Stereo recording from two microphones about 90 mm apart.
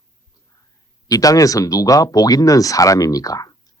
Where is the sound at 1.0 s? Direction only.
40° left (ahead or behind).